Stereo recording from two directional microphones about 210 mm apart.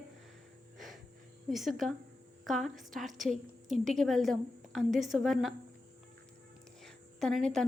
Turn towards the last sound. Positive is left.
turn(degrees=5)  # may be behind; listen again after turning